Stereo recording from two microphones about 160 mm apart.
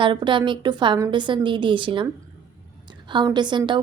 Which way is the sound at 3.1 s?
30° right (ahead or behind).